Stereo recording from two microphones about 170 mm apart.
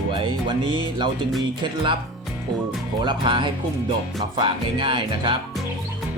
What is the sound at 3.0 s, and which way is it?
Music, 30° right (ahead or behind).